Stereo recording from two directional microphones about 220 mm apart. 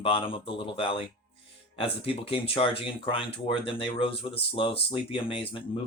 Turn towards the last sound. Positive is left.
turn(degrees=25)  # may be behind; listen again after turning